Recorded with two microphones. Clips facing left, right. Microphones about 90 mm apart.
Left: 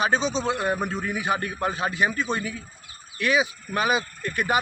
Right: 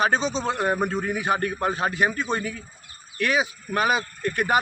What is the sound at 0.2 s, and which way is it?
Speech, 30° left (ahead or behind).